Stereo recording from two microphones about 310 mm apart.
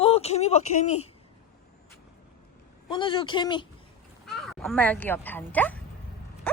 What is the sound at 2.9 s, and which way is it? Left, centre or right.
Speech, centre.